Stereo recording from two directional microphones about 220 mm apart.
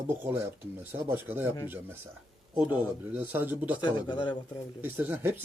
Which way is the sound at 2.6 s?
5° right (ahead or behind).